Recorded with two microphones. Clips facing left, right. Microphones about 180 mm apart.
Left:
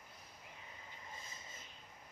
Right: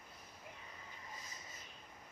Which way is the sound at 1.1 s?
25° left (ahead or behind).